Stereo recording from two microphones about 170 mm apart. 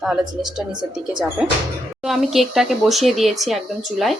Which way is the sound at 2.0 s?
Centre (ahead or behind).